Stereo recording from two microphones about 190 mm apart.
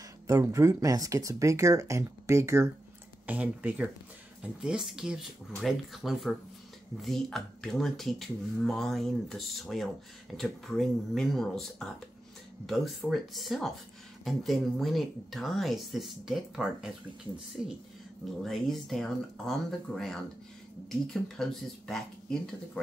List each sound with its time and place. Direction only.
0.3 s speech: 15° right (ahead or behind)
18.4 s speech: centre (ahead or behind)